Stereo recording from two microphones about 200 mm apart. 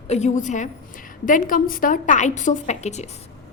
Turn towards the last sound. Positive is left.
turn(degrees=35)  # may be behind; listen again after turning